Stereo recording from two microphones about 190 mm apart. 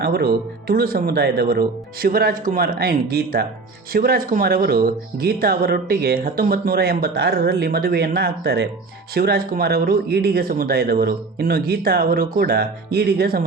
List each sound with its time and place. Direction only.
0.0 s speech: 55° right (ahead or behind)